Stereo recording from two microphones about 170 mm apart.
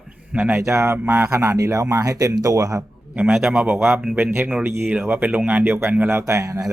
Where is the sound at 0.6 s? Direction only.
15° right (ahead or behind).